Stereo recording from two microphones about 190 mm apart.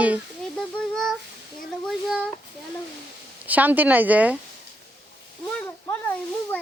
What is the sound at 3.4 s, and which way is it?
Speech, 10° right (ahead or behind).